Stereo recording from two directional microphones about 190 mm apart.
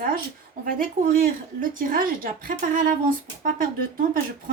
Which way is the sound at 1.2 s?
45° right (ahead or behind).